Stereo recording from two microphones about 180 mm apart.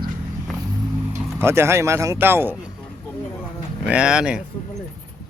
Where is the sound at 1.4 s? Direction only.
15° right (ahead or behind).